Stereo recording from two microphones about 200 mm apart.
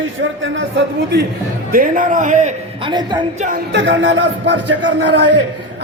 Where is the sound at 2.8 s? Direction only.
20° right (ahead or behind).